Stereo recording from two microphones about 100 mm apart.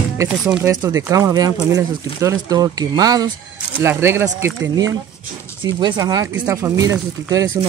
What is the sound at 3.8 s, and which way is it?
Speech, 25° right (ahead or behind).